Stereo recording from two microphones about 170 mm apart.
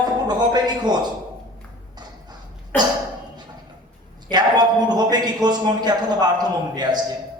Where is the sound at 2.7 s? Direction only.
10° left (ahead or behind).